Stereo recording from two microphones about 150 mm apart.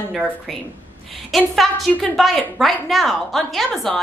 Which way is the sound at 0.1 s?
Centre (ahead or behind).